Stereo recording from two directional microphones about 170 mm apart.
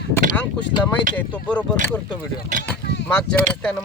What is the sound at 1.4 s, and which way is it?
Speech, 10° left (ahead or behind).